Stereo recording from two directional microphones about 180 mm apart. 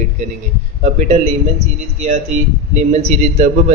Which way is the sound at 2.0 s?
40° right (ahead or behind).